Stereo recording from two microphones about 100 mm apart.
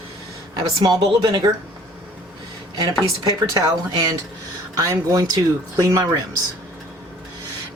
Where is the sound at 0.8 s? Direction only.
50° right (ahead or behind).